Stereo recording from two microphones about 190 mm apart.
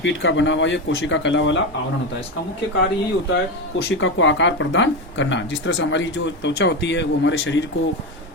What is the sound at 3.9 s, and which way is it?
A man's voice, 85° left.